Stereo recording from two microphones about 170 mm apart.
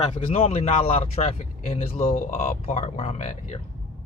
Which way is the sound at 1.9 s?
55° left (ahead or behind).